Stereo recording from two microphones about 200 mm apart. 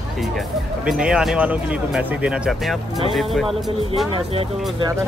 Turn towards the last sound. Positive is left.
turn(degrees=0)  # may be behind; listen again after turning